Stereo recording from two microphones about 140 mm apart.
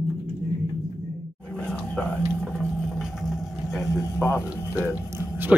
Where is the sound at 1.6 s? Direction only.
10° left (ahead or behind).